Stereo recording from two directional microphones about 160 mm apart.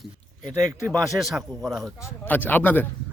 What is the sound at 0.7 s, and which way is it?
Speech, 20° right (ahead or behind).